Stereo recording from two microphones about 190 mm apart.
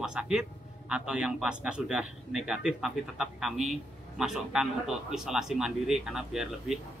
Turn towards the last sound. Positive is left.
turn(degrees=0)  # may be behind; listen again after turning